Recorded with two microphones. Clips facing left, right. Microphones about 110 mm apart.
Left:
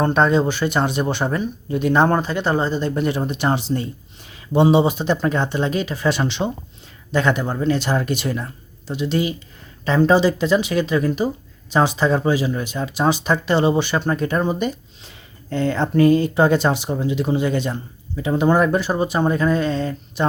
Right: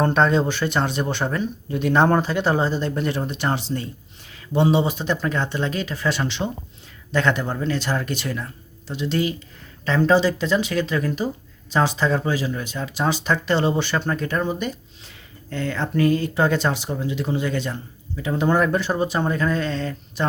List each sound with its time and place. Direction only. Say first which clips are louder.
0.0 s speech: left 2 dB; 5° left (ahead or behind)
2.9 s speech: left 3 dB; 10° left (ahead or behind)